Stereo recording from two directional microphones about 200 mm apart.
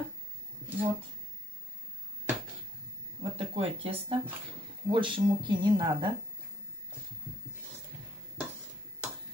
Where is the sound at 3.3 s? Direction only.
30° right (ahead or behind).